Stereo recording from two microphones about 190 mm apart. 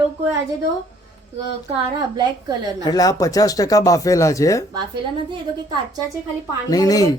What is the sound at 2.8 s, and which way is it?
Speech, 20° left (ahead or behind).